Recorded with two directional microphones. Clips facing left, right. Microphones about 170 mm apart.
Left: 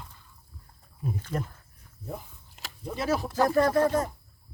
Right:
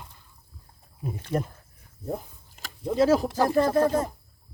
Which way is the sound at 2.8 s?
20° right (ahead or behind).